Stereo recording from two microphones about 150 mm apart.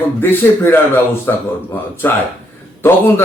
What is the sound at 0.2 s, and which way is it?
A man's voice, 15° left (ahead or behind).